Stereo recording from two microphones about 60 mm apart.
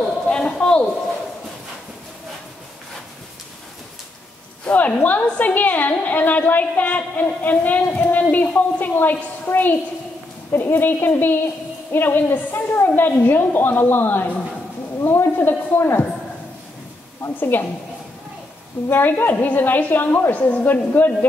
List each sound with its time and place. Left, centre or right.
0.3 s a sound: centre
4.6 s a woman's voice: left
17.3 s a woman's voice: left
18.9 s a woman's voice: left